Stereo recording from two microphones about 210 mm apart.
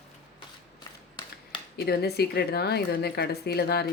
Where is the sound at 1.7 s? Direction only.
50° left (ahead or behind).